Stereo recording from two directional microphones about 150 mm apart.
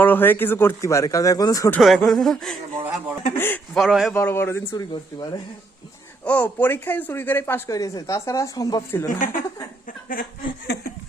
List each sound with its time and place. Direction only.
0.0 s speech: 15° left (ahead or behind)
1.8 s speech: centre (ahead or behind)
3.3 s speech: 15° left (ahead or behind)
3.8 s speech: 5° right (ahead or behind)
4.1 s speech: 15° left (ahead or behind)
4.7 s speech: 30° left (ahead or behind)
6.2 s speech: 10° left (ahead or behind)
9.0 s speech: 65° left (ahead or behind)
9.8 s a sound: 70° left (ahead or behind)